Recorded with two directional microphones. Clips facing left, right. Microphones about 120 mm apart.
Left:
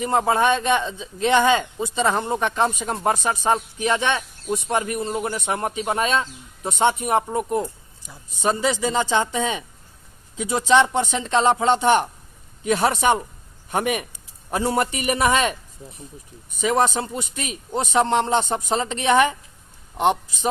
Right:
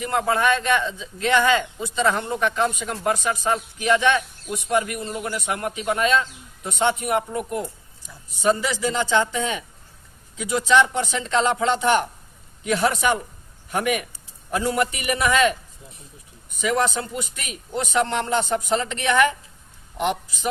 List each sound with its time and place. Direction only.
0.0 s a man's voice: 25° left (ahead or behind)
14.5 s a man's voice: 35° left (ahead or behind)
16.6 s a man's voice: 25° left (ahead or behind)